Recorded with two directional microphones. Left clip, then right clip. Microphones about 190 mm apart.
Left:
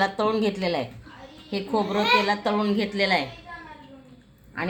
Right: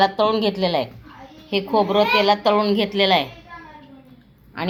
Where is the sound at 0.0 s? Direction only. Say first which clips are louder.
Right 6 dB; 15° right (ahead or behind).